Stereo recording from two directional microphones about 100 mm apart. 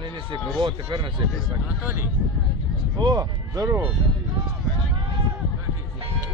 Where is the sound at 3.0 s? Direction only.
40° right (ahead or behind).